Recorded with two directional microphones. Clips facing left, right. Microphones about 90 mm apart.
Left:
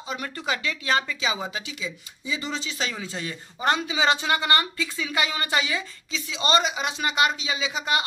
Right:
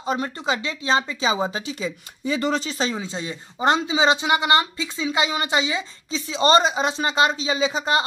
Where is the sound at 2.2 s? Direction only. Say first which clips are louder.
Right 8 dB; 55° right (ahead or behind).